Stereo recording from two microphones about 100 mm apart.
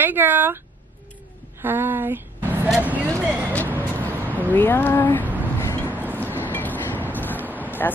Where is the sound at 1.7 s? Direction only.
25° right (ahead or behind).